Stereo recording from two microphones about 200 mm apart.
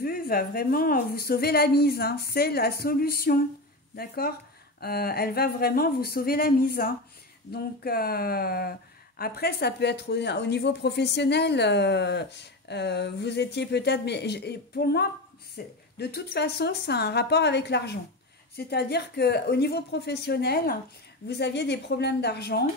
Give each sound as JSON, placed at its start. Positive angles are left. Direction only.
{"t": 0.0, "sound": "a woman's voice", "side_deg": 50}